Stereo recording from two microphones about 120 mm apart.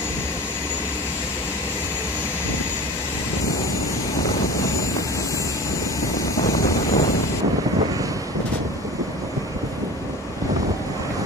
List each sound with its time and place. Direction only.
4.2 s vehicle: 25° left (ahead or behind)
6.3 s vehicle: 25° left (ahead or behind)